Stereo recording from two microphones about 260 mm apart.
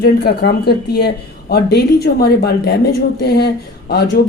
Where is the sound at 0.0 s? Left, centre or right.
Left.